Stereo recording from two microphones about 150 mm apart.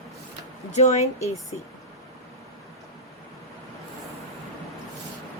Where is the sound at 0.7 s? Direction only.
50° left (ahead or behind).